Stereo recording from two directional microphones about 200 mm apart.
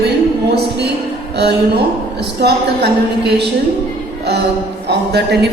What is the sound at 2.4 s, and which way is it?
A woman's voice, 55° right (ahead or behind).